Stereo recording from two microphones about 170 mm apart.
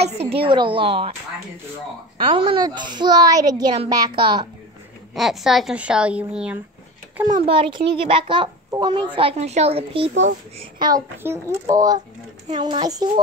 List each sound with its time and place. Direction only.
0.2 s a woman's voice: 35° right (ahead or behind)
2.2 s a woman's voice: 30° right (ahead or behind)
5.1 s speech: centre (ahead or behind)
7.2 s a woman's voice: 30° right (ahead or behind)